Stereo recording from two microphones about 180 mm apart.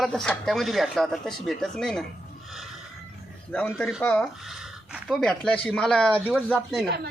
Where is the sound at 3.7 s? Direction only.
Centre (ahead or behind).